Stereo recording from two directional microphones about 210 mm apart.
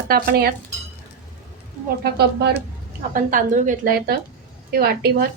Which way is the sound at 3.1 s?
40° right (ahead or behind).